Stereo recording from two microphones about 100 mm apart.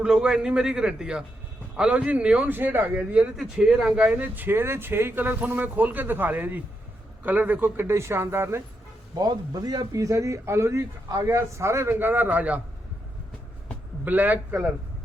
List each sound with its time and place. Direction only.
0.0 s speech: 10° right (ahead or behind); by 8.6 s 25° right (ahead or behind)
9.1 s speech: 40° right (ahead or behind); by 12.6 s 15° right (ahead or behind)
14.0 s speech: 15° right (ahead or behind)